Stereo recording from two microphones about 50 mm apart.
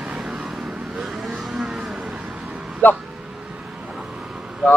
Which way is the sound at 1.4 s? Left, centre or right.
Centre.